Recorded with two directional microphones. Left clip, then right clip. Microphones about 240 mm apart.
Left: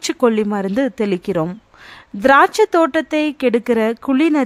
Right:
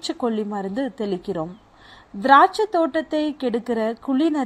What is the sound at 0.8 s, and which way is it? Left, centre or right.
Speech, left.